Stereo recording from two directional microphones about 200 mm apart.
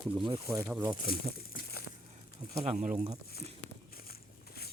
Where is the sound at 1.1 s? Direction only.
50° left (ahead or behind).